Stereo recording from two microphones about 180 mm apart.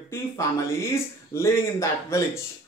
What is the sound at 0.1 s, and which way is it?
Speech, 15° left (ahead or behind).